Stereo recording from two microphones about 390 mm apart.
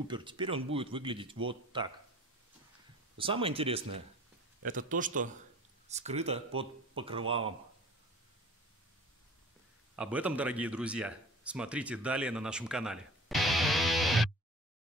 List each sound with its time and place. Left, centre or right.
0.1 s speech: centre
3.2 s a man's voice: centre
9.9 s speech: centre